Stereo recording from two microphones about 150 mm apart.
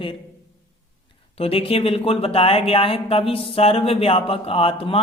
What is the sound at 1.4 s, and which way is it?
Speech, 40° left (ahead or behind).